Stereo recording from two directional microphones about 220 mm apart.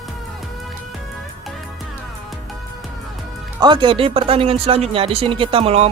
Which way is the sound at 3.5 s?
20° right (ahead or behind).